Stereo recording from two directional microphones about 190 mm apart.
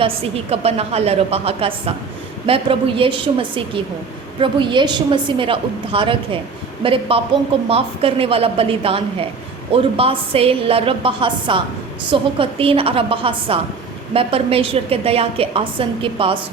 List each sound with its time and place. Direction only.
0.5 s a woman's voice: 30° right (ahead or behind)